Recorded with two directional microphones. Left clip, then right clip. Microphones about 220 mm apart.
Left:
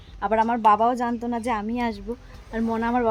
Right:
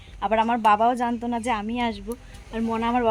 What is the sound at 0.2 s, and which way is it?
Speech, 5° left (ahead or behind).